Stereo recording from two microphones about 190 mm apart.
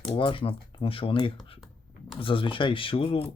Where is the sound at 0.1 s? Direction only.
25° left (ahead or behind).